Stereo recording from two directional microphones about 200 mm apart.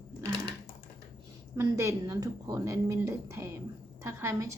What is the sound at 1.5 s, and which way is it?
A woman's voice, 15° right (ahead or behind).